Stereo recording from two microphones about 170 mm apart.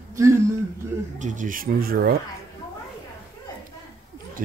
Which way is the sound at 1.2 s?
45° right (ahead or behind).